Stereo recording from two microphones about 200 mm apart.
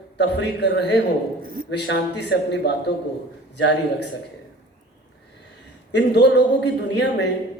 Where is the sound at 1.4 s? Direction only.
45° right (ahead or behind).